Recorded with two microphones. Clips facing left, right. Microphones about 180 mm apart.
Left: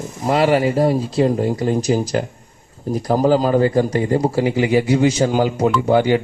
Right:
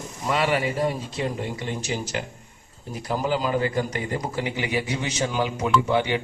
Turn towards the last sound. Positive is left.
turn(degrees=40)  # may be behind; listen again after turning